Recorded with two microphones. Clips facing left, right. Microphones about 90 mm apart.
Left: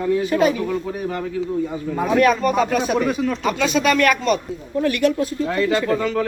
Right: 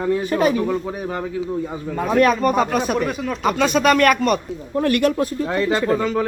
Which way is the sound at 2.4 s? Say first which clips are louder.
Even; 45° right (ahead or behind).